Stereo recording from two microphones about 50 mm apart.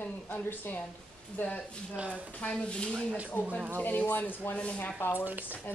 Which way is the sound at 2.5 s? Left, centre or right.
Centre.